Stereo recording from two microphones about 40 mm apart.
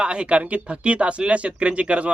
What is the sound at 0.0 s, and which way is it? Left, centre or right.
Speech, right.